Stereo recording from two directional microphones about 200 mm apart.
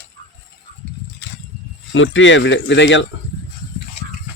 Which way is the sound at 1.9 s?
70° left (ahead or behind).